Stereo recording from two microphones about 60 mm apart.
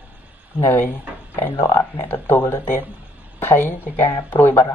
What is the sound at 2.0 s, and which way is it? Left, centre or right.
A woman's voice, left.